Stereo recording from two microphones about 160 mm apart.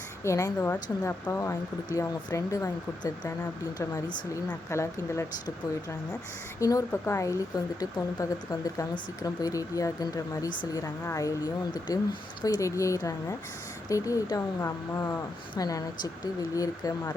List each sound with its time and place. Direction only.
0.3 s speech: 20° left (ahead or behind)
6.6 s speech: 20° left (ahead or behind)